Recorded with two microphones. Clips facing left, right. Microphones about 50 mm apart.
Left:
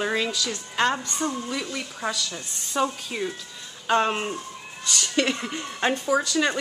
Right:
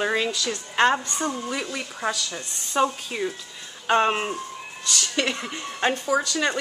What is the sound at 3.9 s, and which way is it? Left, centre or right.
A woman's voice, centre.